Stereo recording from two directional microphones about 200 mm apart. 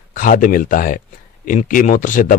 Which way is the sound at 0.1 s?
45° left (ahead or behind).